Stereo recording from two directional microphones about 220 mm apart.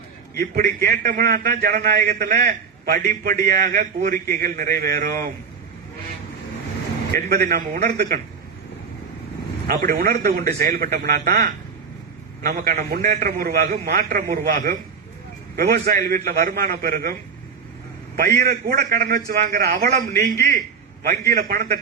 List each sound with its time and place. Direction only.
0.3 s a man's voice: 40° right (ahead or behind)
7.3 s a man's voice: 45° right (ahead or behind)
9.6 s a man's voice: 45° right (ahead or behind)
18.2 s a man's voice: 45° right (ahead or behind)